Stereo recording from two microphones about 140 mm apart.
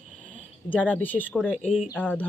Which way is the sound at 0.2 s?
65° right (ahead or behind).